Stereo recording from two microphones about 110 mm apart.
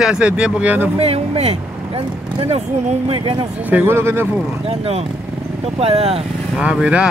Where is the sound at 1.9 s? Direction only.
55° right (ahead or behind).